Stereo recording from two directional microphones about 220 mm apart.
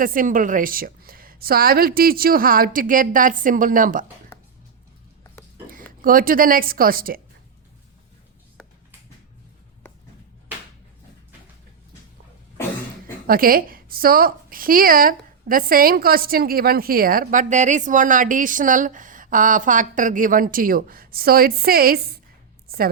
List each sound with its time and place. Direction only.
0.0 s a woman's voice: 40° right (ahead or behind)
5.6 s speech: 40° right (ahead or behind)
13.2 s a woman's voice: 40° right (ahead or behind)